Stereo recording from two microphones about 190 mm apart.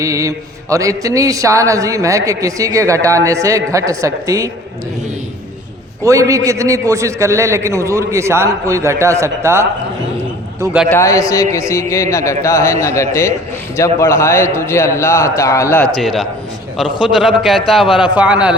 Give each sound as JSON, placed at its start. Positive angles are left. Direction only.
{"t": 0.0, "sound": "speech", "side_deg": -15}
{"t": 6.0, "sound": "speech", "side_deg": -15}
{"t": 10.8, "sound": "a man's voice", "side_deg": 15}
{"t": 16.0, "sound": "a man's voice", "side_deg": 0}